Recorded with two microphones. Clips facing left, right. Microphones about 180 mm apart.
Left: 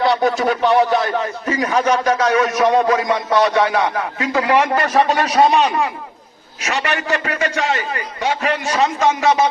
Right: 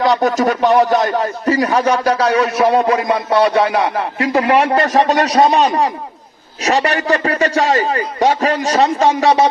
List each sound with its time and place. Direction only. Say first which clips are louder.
0.0 s a man's voice: right 2 dB; 45° right (ahead or behind)
3.4 s music: right 3 dB; 30° right (ahead or behind)
4.2 s a man's voice: right 3 dB; 35° right (ahead or behind)